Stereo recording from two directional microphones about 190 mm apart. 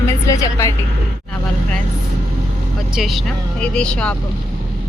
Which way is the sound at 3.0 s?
Centre (ahead or behind).